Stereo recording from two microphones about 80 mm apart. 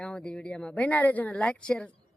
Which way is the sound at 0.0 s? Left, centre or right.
Centre.